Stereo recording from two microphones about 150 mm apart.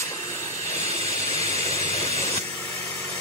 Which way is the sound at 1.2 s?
45° right (ahead or behind).